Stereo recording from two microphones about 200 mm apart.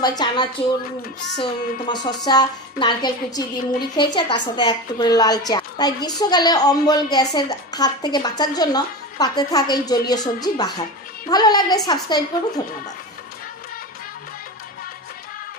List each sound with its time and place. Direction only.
0.0 s a woman's voice: 20° left (ahead or behind)